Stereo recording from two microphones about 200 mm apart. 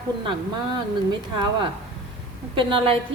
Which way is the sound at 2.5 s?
25° right (ahead or behind).